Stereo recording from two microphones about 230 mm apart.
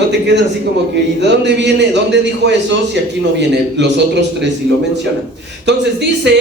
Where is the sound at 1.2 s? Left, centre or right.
Right.